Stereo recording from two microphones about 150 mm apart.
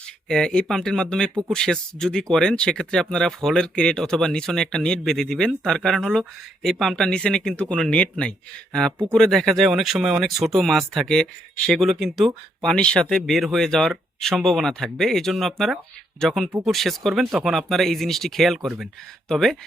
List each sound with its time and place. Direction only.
0.3 s speech: 5° left (ahead or behind)